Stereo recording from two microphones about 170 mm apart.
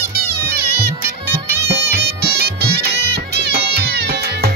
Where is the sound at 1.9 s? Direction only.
70° right (ahead or behind).